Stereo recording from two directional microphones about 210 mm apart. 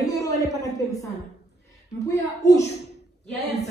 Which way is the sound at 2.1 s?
15° left (ahead or behind).